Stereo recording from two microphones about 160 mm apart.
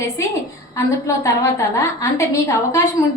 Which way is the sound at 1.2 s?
20° left (ahead or behind).